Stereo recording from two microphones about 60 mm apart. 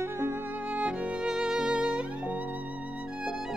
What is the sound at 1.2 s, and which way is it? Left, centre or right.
Music, centre.